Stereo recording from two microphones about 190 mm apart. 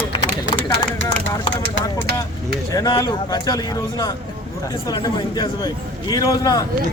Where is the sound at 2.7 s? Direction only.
20° left (ahead or behind).